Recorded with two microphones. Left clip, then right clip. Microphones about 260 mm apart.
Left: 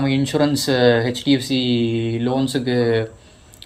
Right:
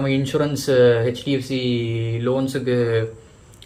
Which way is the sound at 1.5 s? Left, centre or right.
Centre.